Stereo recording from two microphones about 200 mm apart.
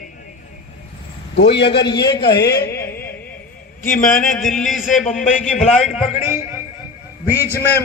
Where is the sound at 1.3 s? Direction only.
60° left (ahead or behind).